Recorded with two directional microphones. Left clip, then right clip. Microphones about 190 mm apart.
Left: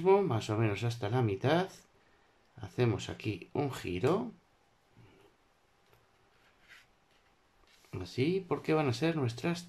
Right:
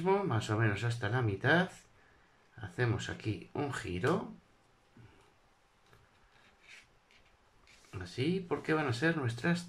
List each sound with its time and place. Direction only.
0.0 s speech: 15° left (ahead or behind)
7.9 s speech: 20° left (ahead or behind)